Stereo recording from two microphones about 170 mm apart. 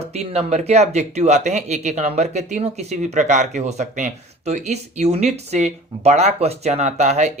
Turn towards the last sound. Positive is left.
turn(degrees=-45)  # may be behind; listen again after turning